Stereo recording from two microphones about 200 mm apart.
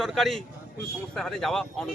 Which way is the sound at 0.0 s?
Centre (ahead or behind).